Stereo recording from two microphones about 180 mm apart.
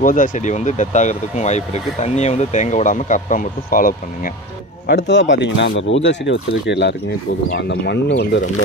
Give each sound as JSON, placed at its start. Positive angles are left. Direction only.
{"t": 0.0, "sound": "speech", "side_deg": 50}
{"t": 4.8, "sound": "speech", "side_deg": 75}